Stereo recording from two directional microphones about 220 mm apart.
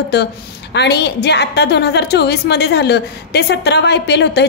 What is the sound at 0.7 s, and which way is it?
A woman's voice, 50° left (ahead or behind).